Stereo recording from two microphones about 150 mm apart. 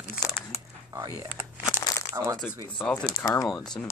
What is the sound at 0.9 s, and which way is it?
Speech, 25° right (ahead or behind).